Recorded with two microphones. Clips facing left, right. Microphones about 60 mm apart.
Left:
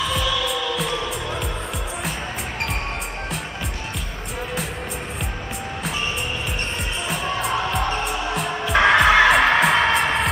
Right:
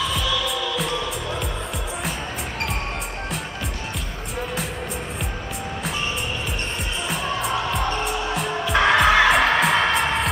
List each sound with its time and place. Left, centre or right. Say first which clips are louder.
0.1 s music: left 1 dB; centre
7.1 s music: left 1 dB; centre